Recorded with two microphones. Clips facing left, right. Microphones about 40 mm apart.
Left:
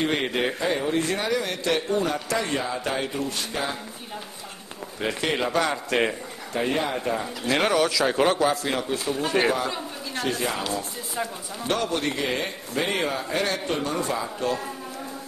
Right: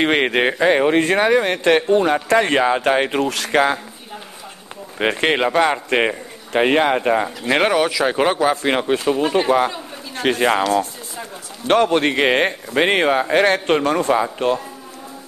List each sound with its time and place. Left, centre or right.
0.0 s speech: right
4.9 s speech: right
6.5 s speech: right
7.4 s speech: right
8.6 s speech: right